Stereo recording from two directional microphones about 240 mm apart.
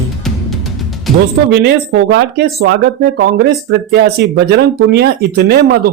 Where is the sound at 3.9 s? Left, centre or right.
Right.